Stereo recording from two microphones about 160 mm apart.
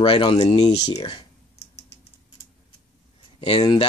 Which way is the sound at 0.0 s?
35° left (ahead or behind).